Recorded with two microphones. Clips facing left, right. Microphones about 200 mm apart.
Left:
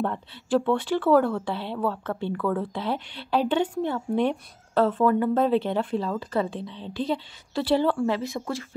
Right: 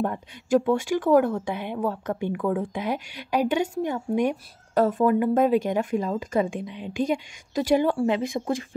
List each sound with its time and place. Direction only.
0.6 s speech: 10° right (ahead or behind)